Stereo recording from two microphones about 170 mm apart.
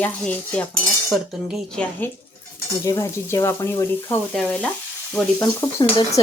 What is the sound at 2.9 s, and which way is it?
Stir, 15° left (ahead or behind).